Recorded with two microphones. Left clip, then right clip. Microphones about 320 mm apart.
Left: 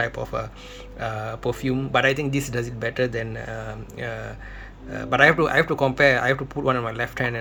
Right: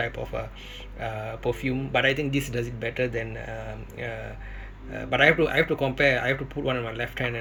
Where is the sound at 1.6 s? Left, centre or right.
Centre.